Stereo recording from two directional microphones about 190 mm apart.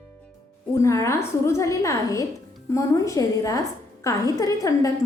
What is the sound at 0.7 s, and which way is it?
A woman's voice, 15° left (ahead or behind).